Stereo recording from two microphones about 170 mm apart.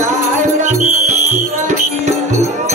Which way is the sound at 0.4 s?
45° right (ahead or behind).